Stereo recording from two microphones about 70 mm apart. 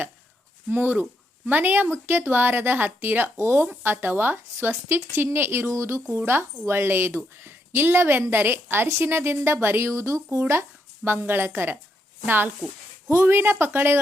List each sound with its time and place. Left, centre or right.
0.7 s a woman's voice: right
10.4 s a woman's voice: right